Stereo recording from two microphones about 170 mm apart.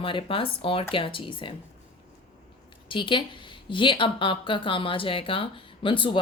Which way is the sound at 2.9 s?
30° left (ahead or behind).